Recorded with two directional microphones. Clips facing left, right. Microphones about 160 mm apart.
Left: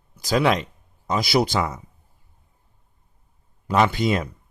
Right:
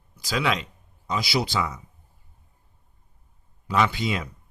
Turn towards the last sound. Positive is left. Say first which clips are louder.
# left 5 dB
turn(degrees=45)  # may be behind; listen again after turning